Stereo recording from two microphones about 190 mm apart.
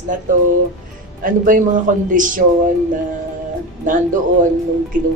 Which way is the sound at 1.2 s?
45° right (ahead or behind).